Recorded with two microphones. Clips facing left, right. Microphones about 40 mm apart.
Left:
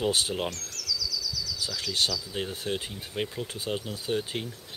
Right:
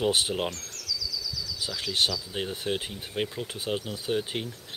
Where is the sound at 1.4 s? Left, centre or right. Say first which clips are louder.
Even; right.